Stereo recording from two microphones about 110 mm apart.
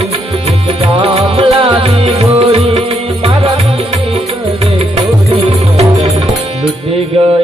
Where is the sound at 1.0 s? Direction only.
55° right (ahead or behind).